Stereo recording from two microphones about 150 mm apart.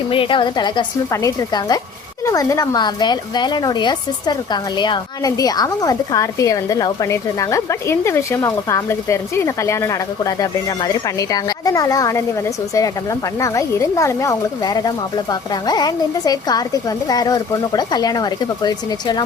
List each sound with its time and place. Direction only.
0.1 s a woman's voice: 35° left (ahead or behind)